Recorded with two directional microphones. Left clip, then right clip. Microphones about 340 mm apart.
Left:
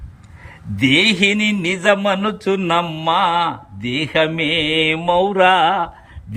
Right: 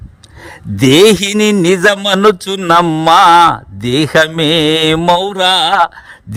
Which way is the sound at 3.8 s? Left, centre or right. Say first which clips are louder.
Right 7 dB; centre.